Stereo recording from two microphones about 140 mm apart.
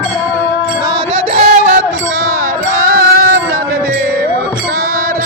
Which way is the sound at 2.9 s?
90° right.